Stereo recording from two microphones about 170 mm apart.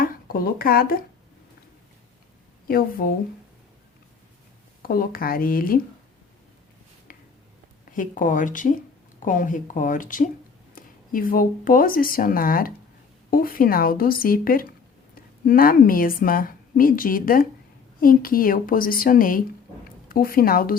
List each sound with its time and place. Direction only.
0.0 s speech: 60° left (ahead or behind)
2.6 s a woman's voice: 60° left (ahead or behind)
4.8 s a woman's voice: 60° left (ahead or behind)
7.1 s a sound: 55° left (ahead or behind)
7.9 s a woman's voice: 50° left (ahead or behind)